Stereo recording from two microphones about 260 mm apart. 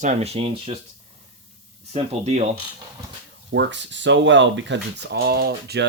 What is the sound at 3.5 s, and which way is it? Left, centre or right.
Speech, right.